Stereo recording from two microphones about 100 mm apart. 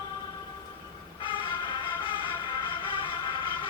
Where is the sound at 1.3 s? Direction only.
55° left (ahead or behind).